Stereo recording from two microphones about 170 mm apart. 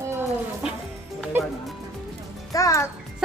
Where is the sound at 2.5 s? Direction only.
20° left (ahead or behind).